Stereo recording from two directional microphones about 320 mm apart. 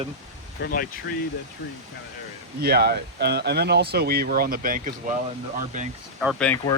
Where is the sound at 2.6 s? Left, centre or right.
Right.